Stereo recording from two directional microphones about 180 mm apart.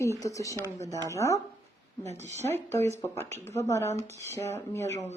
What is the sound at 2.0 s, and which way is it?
Speech, 40° right (ahead or behind).